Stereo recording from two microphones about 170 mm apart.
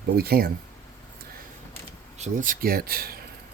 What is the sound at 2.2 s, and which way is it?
Speech, 50° right (ahead or behind).